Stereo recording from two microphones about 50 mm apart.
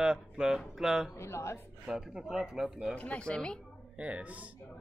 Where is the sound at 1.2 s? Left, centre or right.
Left.